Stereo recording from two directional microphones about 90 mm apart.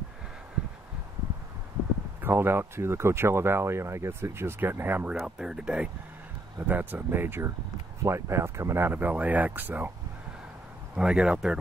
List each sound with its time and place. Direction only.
2.2 s speech: 25° right (ahead or behind)
5.2 s speech: 10° right (ahead or behind)
6.7 s speech: 20° right (ahead or behind)
11.0 s speech: 10° right (ahead or behind)